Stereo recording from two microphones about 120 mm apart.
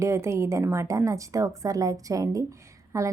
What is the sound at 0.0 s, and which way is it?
A woman's voice, 25° right (ahead or behind).